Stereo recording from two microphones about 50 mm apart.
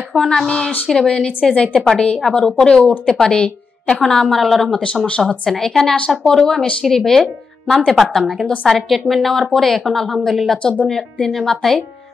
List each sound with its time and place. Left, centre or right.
0.1 s a woman's voice: centre
4.0 s speech: centre
4.8 s a woman's voice: centre
5.5 s a woman's voice: centre
10.6 s speech: left
11.2 s speech: centre